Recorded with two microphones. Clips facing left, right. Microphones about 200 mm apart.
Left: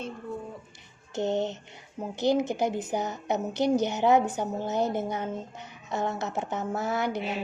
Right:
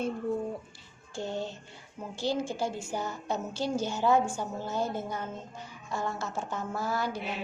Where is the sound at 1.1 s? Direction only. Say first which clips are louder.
Left 7 dB; 20° left (ahead or behind).